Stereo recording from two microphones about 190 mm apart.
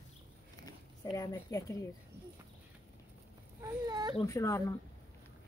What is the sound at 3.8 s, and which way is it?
Speech, 20° right (ahead or behind).